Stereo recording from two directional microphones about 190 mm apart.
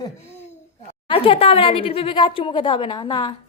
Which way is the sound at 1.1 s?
30° left (ahead or behind).